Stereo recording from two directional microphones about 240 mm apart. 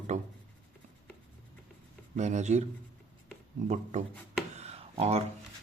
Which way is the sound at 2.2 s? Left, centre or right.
Right.